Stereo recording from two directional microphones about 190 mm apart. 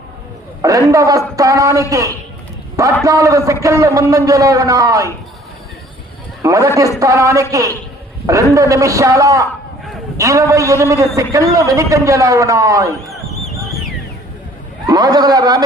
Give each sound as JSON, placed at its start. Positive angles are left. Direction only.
{"t": 0.6, "sound": "a man's voice", "side_deg": -15}
{"t": 6.4, "sound": "a man's voice", "side_deg": -15}
{"t": 8.5, "sound": "a man's voice", "side_deg": -15}
{"t": 14.8, "sound": "a man's voice", "side_deg": -20}